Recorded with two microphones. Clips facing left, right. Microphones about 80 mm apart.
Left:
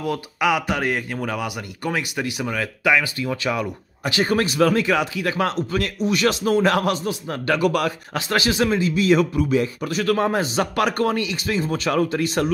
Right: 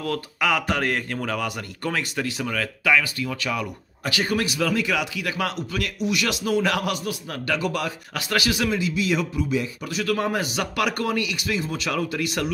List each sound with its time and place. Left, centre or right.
0.0 s speech: centre; by 7.5 s left
7.5 s speech: left
8.1 s a man's voice: left